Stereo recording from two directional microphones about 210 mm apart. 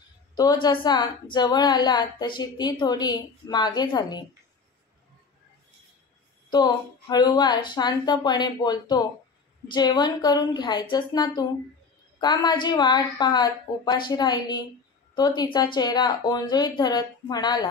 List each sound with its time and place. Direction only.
0.4 s a woman's voice: 20° left (ahead or behind)
6.5 s a woman's voice: 20° left (ahead or behind)